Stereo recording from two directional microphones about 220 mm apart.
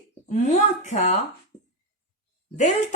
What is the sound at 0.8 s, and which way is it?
Speech, 30° left (ahead or behind).